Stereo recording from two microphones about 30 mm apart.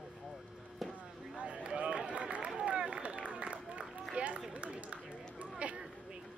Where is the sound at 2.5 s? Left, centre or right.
Right.